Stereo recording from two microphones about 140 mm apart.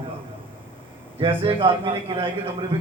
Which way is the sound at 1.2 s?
40° right (ahead or behind).